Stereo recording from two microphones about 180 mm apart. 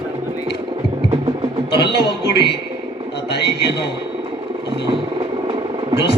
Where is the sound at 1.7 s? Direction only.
65° left (ahead or behind).